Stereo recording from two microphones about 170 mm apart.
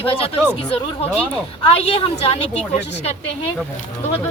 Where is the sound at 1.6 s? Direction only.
35° left (ahead or behind).